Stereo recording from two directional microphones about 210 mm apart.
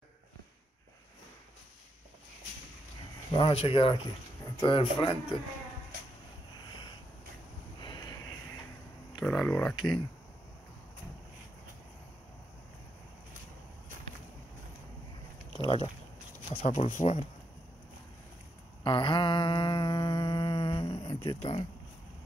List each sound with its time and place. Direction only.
3.3 s speech: 25° left (ahead or behind)
6.6 s a sound: 20° left (ahead or behind)
7.8 s vehicle: 20° left (ahead or behind)
9.2 s speech: 5° left (ahead or behind)
9.8 s speech: 20° left (ahead or behind)
15.5 s a sound: 25° left (ahead or behind)
16.5 s speech: 35° left (ahead or behind)
18.9 s humming: 25° left (ahead or behind)